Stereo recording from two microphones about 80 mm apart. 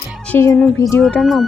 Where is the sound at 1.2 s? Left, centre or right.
Centre.